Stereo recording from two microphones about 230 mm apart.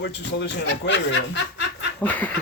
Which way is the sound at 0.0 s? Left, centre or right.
Left.